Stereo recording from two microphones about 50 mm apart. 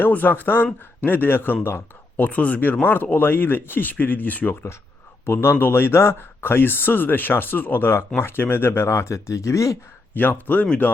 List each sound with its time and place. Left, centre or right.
0.1 s speech: left
5.2 s speech: left
8.9 s speech: left
10.2 s speech: left